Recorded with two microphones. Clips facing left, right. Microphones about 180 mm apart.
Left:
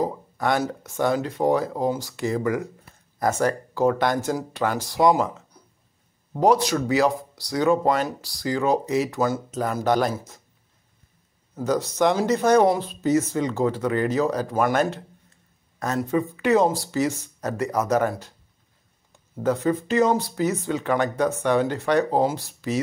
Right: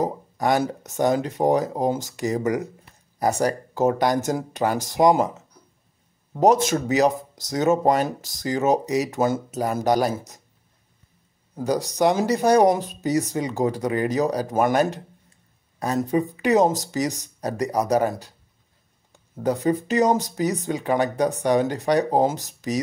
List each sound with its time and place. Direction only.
0.0 s a sound: 15° right (ahead or behind)
0.9 s speech: 20° right (ahead or behind)
6.6 s speech: 20° right (ahead or behind)
9.6 s speech: 15° right (ahead or behind)
11.5 s speech: 15° right (ahead or behind)
16.1 s speech: 15° right (ahead or behind)
19.4 s speech: 15° right (ahead or behind)
20.0 s speech: 40° right (ahead or behind)
20.3 s speech: 15° right (ahead or behind)